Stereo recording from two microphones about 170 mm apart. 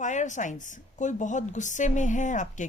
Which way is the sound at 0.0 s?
45° left (ahead or behind).